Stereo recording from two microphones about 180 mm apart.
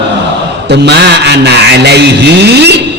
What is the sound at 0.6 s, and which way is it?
A man's voice, 70° right (ahead or behind).